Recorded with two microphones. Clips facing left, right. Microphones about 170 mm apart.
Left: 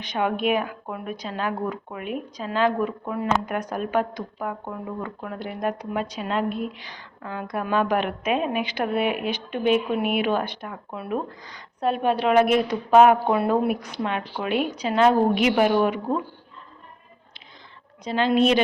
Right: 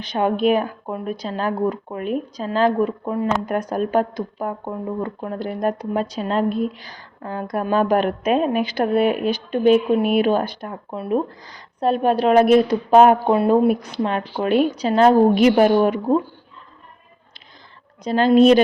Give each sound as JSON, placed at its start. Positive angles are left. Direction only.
{"t": 0.0, "sound": "speech", "side_deg": -35}
{"t": 13.3, "sound": "speech", "side_deg": -25}
{"t": 18.0, "sound": "speech", "side_deg": -40}